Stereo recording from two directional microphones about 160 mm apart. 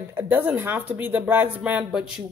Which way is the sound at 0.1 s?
15° right (ahead or behind).